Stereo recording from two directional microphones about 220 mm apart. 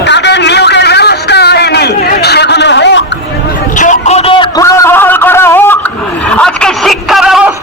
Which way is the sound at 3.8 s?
35° left (ahead or behind).